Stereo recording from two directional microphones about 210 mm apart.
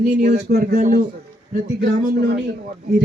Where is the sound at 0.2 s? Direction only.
50° right (ahead or behind).